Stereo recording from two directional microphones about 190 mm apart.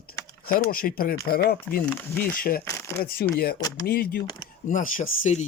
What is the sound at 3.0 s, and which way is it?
Speech, 55° left (ahead or behind).